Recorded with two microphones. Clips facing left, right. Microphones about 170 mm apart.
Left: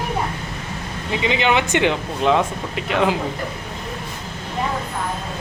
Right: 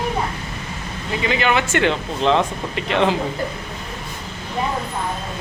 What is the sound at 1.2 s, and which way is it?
Speech, 20° left (ahead or behind).